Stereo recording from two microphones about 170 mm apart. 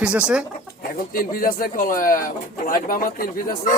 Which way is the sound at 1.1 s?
60° left (ahead or behind).